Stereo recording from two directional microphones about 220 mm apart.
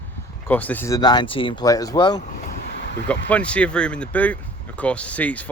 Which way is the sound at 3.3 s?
5° left (ahead or behind).